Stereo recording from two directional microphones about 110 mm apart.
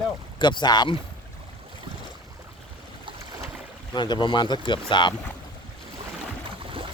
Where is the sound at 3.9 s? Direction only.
40° left (ahead or behind).